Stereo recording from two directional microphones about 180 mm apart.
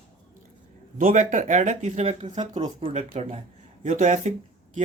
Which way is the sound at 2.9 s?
35° right (ahead or behind).